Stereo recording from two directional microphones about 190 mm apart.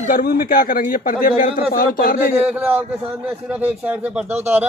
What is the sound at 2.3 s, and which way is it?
Speech, 10° right (ahead or behind).